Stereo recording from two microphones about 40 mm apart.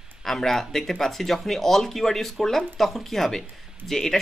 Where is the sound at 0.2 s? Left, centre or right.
Centre.